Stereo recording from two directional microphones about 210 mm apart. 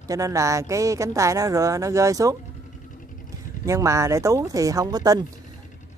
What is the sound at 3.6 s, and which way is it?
Speech, 15° right (ahead or behind).